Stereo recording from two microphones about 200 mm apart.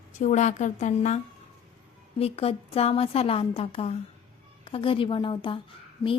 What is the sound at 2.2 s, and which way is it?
A woman's voice, 30° left (ahead or behind).